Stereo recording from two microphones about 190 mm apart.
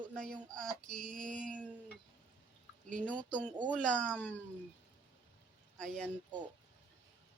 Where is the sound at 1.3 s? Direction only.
45° right (ahead or behind).